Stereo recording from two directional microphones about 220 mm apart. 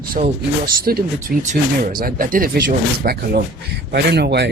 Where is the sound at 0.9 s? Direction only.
40° right (ahead or behind).